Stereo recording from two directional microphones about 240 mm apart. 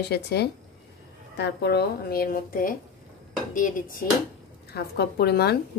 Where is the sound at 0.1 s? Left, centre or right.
Left.